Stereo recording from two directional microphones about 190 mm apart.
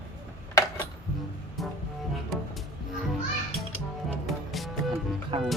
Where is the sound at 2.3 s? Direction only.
Centre (ahead or behind).